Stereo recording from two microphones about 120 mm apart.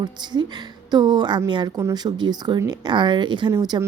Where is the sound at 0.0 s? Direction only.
35° right (ahead or behind).